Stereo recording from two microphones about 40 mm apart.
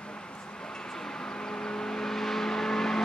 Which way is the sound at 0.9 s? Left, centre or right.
Centre.